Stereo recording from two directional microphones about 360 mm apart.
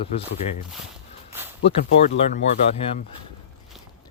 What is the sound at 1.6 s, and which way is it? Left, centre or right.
Speech, left.